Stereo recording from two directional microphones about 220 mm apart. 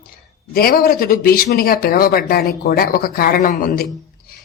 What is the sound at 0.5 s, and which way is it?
Speech, 45° left (ahead or behind).